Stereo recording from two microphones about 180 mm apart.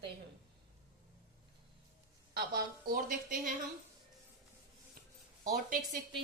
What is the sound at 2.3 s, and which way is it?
A woman's voice, 55° right (ahead or behind).